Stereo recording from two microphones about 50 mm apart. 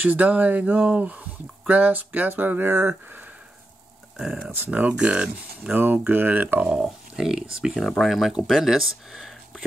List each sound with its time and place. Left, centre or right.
0.0 s speech: right
4.2 s speech: centre
4.6 s speech: right
5.8 s speech: right
6.8 s speech: centre
8.0 s speech: centre